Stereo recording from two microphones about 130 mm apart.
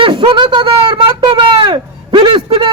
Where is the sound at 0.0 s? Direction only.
40° right (ahead or behind).